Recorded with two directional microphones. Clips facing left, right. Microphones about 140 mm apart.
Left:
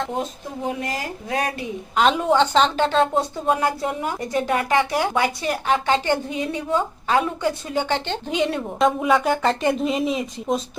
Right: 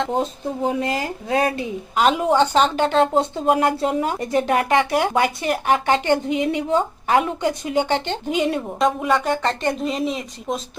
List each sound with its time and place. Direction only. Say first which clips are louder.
0.1 s speech: right 5 dB; 35° right (ahead or behind)
2.0 s a woman's voice: right 1 dB; 5° right (ahead or behind)